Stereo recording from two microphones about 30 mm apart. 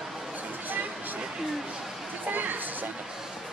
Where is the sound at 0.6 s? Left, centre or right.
Right.